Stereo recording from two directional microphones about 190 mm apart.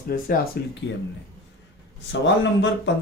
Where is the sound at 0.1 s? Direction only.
50° left (ahead or behind).